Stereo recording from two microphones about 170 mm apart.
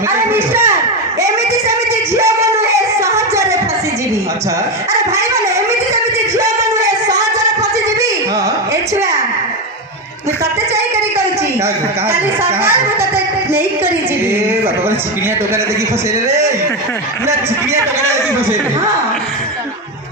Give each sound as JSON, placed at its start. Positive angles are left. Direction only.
{"t": 0.3, "sound": "a sound", "side_deg": -15}
{"t": 2.1, "sound": "music", "side_deg": -15}
{"t": 5.9, "sound": "music", "side_deg": -20}
{"t": 12.4, "sound": "speech", "side_deg": -15}